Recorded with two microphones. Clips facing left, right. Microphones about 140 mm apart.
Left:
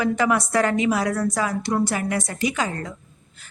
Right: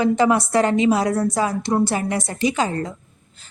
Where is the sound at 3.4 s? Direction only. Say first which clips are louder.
Left 1 dB; 25° right (ahead or behind).